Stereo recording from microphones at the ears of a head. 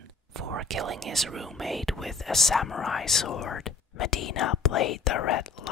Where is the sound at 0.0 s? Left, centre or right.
Right.